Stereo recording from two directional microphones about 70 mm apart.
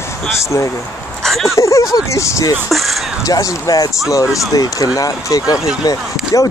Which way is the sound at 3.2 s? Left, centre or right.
Left.